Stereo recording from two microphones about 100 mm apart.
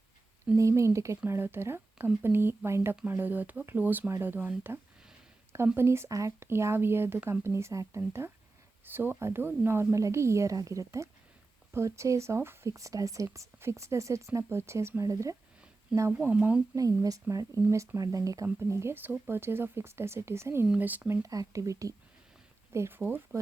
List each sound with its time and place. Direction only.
0.5 s speech: 30° right (ahead or behind)
15.9 s speech: 10° right (ahead or behind)
16.7 s speech: 35° right (ahead or behind); by 21.2 s 15° right (ahead or behind)
21.2 s speech: 35° right (ahead or behind); by 23.4 s 20° right (ahead or behind)